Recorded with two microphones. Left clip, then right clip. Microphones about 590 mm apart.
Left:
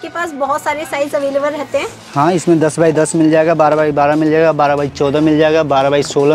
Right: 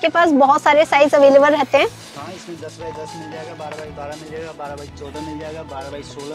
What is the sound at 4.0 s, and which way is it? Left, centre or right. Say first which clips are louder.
Speech: left 19 dB; left.